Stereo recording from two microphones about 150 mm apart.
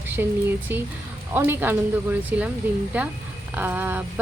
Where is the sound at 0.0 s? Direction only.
15° right (ahead or behind).